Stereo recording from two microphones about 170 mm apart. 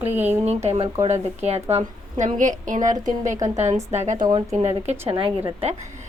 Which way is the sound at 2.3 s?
50° right (ahead or behind).